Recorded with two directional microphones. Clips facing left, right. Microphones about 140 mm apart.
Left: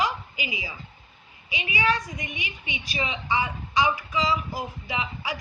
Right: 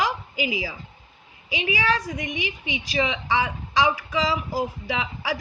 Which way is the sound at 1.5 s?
90° right.